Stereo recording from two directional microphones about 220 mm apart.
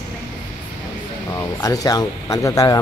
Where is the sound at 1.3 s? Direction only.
15° left (ahead or behind).